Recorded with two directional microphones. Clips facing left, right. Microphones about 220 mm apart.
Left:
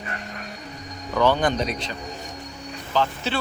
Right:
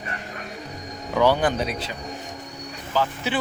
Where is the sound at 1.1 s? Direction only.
10° right (ahead or behind).